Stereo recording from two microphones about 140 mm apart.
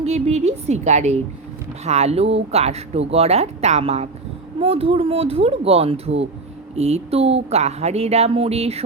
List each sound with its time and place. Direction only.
0.0 s speech: 50° right (ahead or behind)